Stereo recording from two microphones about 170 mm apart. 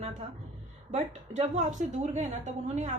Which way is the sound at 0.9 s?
45° right (ahead or behind).